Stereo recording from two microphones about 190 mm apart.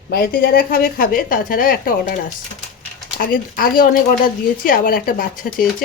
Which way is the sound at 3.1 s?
50° left (ahead or behind).